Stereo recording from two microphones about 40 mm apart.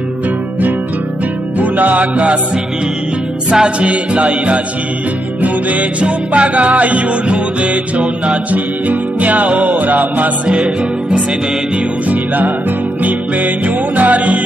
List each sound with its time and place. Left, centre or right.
1.6 s music: right
3.4 s music: right
10.5 s music: centre
12.1 s music: right